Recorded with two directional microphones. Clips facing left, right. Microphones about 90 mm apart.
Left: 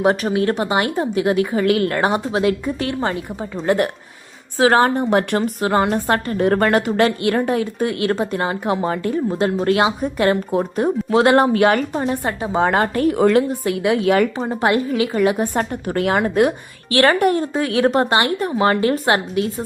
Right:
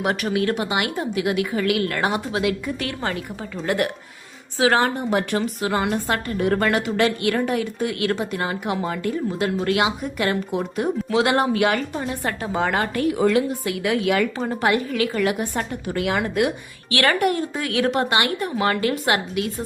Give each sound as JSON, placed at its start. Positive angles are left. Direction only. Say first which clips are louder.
{"t": 0.0, "sound": "a woman's voice", "louder": "left 5 dB", "side_deg": 30}
{"t": 4.5, "sound": "a woman's voice", "louder": "left 5 dB", "side_deg": 40}
{"t": 12.2, "sound": "speech", "louder": "left 3 dB", "side_deg": 20}
{"t": 12.5, "sound": "a woman's voice", "louder": "left 6 dB", "side_deg": 35}
{"t": 13.8, "sound": "a woman's voice", "louder": "left 4 dB", "side_deg": 30}
{"t": 15.5, "sound": "a woman's voice", "louder": "left 5 dB", "side_deg": 45}